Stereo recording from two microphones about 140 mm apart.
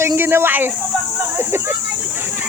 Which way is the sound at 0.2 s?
15° right (ahead or behind).